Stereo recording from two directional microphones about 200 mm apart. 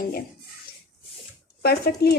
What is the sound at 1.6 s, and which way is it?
Speech, 55° left (ahead or behind).